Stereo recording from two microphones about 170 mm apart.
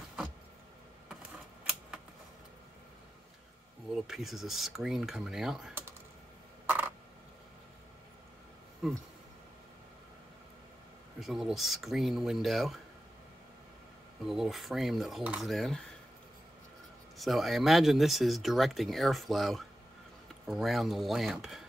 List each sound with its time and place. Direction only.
1.6 s a sound: 5° right (ahead or behind)
3.9 s speech: centre (ahead or behind)
6.6 s a sound: 10° right (ahead or behind)
11.1 s speech: centre (ahead or behind)
14.2 s speech: centre (ahead or behind)
17.2 s speech: centre (ahead or behind)